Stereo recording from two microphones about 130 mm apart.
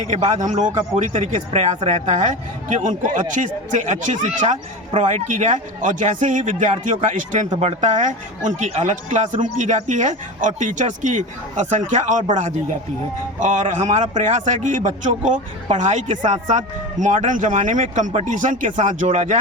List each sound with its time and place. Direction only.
0.0 s a man's voice: 60° right (ahead or behind)
7.1 s a man's voice: 65° right (ahead or behind)
19.0 s a man's voice: 65° right (ahead or behind)